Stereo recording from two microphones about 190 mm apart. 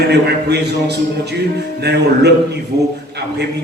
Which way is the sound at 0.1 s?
60° right (ahead or behind).